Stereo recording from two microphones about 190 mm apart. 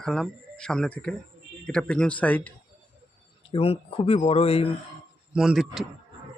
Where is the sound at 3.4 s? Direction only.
30° left (ahead or behind).